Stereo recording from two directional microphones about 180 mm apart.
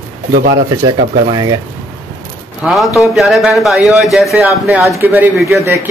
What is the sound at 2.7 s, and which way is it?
Speech, centre (ahead or behind).